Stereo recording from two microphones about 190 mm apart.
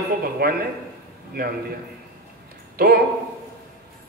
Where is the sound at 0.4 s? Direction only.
55° right (ahead or behind).